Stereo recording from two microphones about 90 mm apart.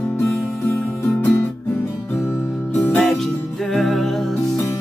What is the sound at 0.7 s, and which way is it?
Music, 20° left (ahead or behind).